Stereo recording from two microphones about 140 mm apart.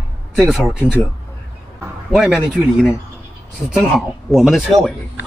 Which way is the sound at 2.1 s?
Centre (ahead or behind).